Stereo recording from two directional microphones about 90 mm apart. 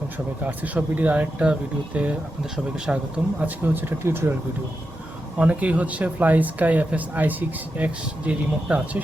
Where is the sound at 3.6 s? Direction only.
25° right (ahead or behind).